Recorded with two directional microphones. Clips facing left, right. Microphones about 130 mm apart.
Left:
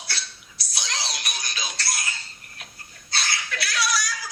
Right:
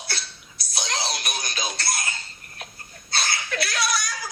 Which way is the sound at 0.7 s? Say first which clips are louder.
Right 4 dB; 50° right (ahead or behind).